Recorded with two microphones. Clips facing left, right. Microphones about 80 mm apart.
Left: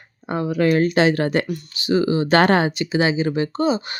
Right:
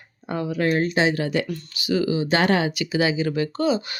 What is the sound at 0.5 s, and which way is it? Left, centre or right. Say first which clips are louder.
Speech: left 4 dB; left.